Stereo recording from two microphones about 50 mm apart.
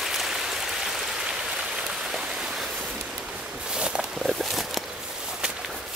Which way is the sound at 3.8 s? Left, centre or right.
Centre.